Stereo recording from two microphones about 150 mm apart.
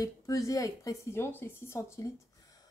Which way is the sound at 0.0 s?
20° left (ahead or behind).